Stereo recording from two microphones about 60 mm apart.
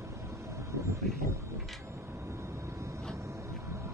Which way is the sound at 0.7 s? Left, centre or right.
Right.